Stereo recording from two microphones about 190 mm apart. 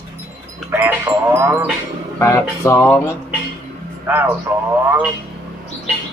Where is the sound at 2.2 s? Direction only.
15° left (ahead or behind).